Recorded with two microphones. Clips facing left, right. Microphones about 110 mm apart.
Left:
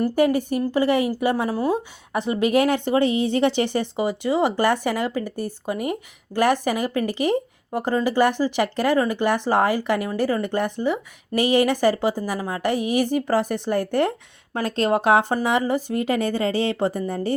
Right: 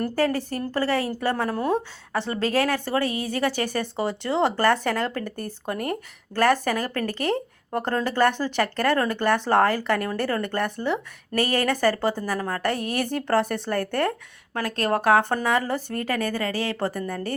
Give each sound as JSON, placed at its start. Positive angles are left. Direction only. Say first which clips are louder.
{"t": 0.2, "sound": "a woman's voice", "louder": "left 5 dB", "side_deg": 15}